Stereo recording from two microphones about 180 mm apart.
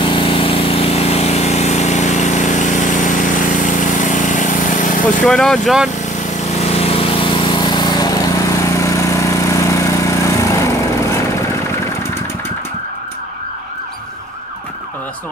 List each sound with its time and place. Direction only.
0.0 s engine: 30° left (ahead or behind); by 4.9 s 45° left (ahead or behind)
5.2 s speech: centre (ahead or behind)
6.6 s vehicle: 35° left (ahead or behind); by 12.2 s 15° left (ahead or behind)